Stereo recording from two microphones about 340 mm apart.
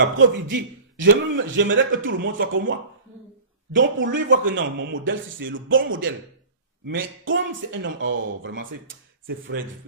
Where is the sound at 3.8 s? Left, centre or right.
Right.